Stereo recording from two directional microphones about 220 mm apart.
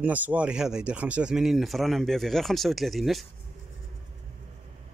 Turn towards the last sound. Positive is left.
turn(degrees=0)  # may be behind; listen again after turning